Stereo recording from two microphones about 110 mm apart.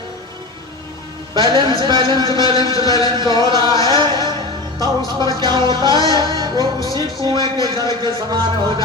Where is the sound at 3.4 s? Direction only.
45° right (ahead or behind).